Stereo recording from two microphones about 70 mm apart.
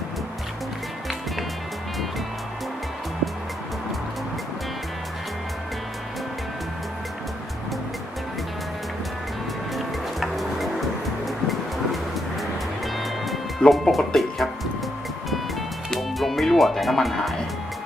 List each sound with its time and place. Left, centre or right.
9.7 s music: centre
13.0 s music: centre
15.9 s music: centre